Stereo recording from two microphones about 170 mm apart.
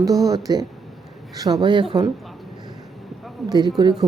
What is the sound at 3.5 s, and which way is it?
Speech, 25° right (ahead or behind).